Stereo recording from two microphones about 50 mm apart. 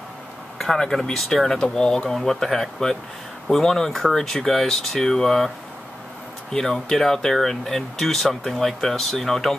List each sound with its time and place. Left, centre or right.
0.6 s speech: centre
6.5 s speech: centre